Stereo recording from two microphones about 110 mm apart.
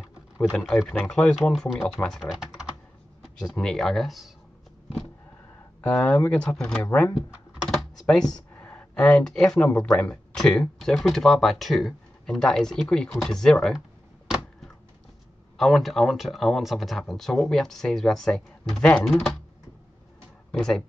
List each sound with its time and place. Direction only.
0.7 s speech: 5° left (ahead or behind)
2.3 s typing: 5° right (ahead or behind)
3.3 s speech: 5° left (ahead or behind)
5.8 s a sound: 30° left (ahead or behind)
6.0 s speech: 10° left (ahead or behind)
8.1 s speech: 5° left (ahead or behind)
15.5 s speech: centre (ahead or behind)
20.5 s speech: 5° left (ahead or behind)